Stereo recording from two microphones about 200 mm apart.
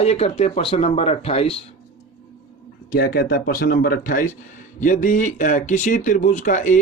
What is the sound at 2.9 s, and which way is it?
Speech, 50° left (ahead or behind).